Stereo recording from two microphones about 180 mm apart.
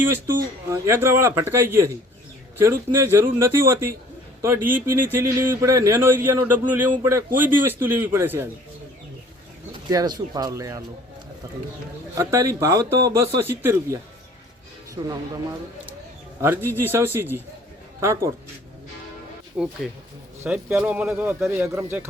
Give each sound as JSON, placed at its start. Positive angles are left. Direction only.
{"t": 0.7, "sound": "speech", "side_deg": -15}
{"t": 9.9, "sound": "speech", "side_deg": -20}
{"t": 16.4, "sound": "speech", "side_deg": -15}
{"t": 19.6, "sound": "speech", "side_deg": -5}